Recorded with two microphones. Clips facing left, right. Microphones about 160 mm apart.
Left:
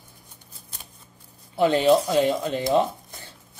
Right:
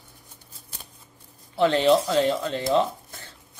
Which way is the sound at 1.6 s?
10° left (ahead or behind).